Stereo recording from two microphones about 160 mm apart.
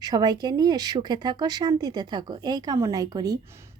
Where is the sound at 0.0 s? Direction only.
25° right (ahead or behind).